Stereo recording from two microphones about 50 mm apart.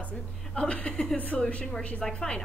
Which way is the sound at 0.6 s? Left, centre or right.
Left.